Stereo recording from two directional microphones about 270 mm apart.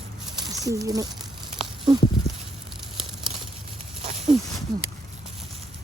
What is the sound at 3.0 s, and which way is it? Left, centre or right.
Crumpling, centre.